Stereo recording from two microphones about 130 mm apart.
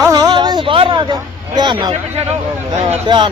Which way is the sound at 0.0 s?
25° right (ahead or behind).